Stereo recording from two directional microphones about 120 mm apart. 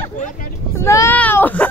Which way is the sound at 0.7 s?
25° left (ahead or behind).